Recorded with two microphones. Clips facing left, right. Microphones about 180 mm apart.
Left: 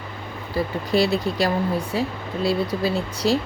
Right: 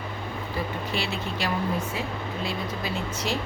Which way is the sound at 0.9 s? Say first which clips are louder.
Left 10 dB; 35° left (ahead or behind).